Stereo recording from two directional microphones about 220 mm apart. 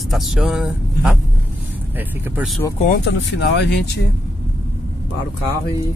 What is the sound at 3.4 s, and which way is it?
Speech, 50° left (ahead or behind).